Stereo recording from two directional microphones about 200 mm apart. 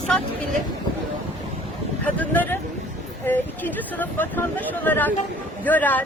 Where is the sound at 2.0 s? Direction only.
10° left (ahead or behind).